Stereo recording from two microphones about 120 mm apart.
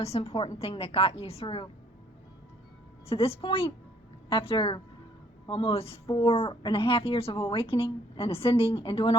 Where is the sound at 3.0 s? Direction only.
55° left (ahead or behind).